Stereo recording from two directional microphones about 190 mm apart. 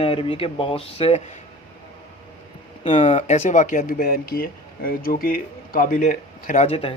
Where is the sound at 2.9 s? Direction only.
35° left (ahead or behind).